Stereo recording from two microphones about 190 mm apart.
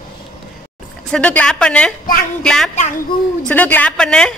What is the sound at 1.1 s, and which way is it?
Speech, 5° left (ahead or behind).